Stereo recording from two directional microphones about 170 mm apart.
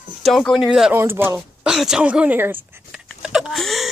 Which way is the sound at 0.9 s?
15° right (ahead or behind).